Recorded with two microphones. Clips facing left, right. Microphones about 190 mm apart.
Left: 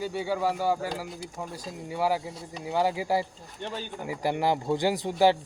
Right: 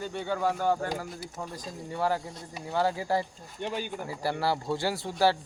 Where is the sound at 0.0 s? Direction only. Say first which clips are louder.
Left 2 dB; 10° left (ahead or behind).